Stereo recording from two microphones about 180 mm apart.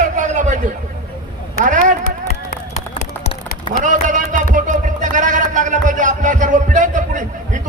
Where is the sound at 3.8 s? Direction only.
45° right (ahead or behind).